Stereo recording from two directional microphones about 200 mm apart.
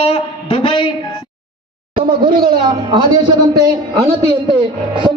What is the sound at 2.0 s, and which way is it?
Speech, 25° right (ahead or behind).